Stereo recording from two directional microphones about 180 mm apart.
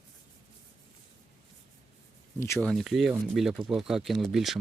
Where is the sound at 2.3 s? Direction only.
15° left (ahead or behind).